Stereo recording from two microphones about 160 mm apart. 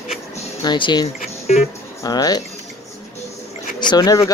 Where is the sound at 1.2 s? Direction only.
45° left (ahead or behind).